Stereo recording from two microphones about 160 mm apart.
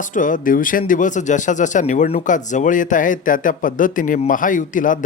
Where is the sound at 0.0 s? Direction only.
55° left (ahead or behind).